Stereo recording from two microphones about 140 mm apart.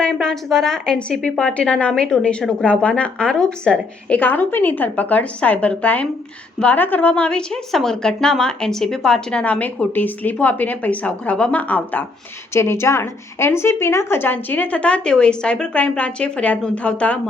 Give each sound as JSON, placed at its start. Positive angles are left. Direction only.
{"t": 0.0, "sound": "a woman's voice", "side_deg": 5}